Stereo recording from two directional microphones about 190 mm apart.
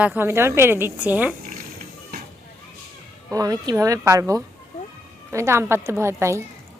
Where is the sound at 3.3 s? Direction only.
20° right (ahead or behind).